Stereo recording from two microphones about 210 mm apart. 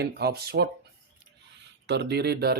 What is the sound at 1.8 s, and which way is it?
Speech, 55° right (ahead or behind).